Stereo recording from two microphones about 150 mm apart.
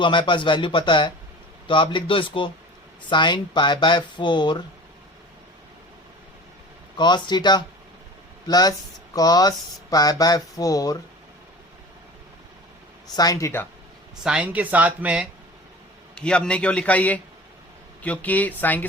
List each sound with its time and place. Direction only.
0.0 s speech: 30° left (ahead or behind)
6.9 s speech: 30° left (ahead or behind)
13.1 s speech: 25° left (ahead or behind)
14.3 s speech: 10° right (ahead or behind)
16.1 s a man's voice: 5° left (ahead or behind)